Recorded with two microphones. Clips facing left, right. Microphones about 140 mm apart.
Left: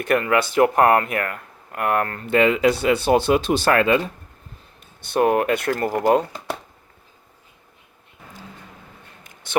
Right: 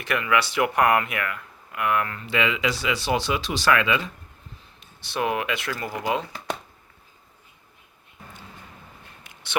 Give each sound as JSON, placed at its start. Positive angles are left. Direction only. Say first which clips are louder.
{"t": 0.0, "sound": "speech", "louder": "left 5 dB", "side_deg": 45}
{"t": 5.1, "sound": "speech", "louder": "left 8 dB", "side_deg": 45}